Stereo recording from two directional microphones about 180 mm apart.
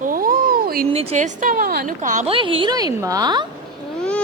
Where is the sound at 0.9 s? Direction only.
35° right (ahead or behind).